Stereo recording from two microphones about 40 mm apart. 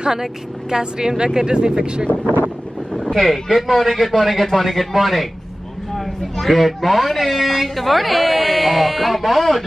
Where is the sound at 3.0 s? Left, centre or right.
Centre.